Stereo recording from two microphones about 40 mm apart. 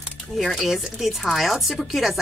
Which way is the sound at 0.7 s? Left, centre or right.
Centre.